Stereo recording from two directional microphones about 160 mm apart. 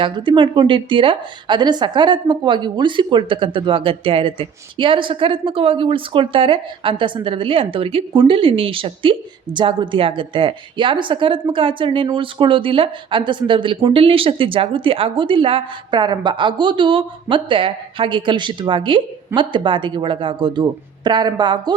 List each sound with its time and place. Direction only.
0.0 s a woman's voice: 30° right (ahead or behind)